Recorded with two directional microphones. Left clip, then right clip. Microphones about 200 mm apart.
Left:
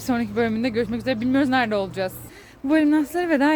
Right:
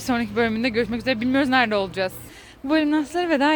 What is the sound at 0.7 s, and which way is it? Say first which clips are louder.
Speech: right 1 dB; 10° right (ahead or behind).